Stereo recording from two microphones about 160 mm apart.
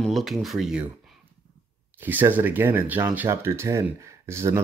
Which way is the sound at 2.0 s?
10° right (ahead or behind).